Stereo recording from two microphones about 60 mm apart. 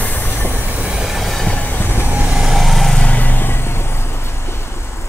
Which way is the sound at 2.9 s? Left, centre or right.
Left.